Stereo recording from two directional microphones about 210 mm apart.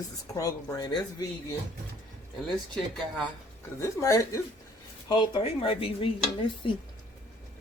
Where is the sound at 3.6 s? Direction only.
10° left (ahead or behind).